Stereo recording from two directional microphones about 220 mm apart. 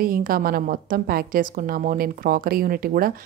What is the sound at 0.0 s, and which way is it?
A woman's voice, 40° right (ahead or behind).